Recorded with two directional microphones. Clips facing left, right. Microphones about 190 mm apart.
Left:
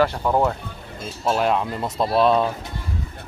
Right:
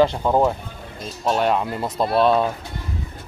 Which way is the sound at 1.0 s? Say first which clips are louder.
Right 1 dB; centre (ahead or behind).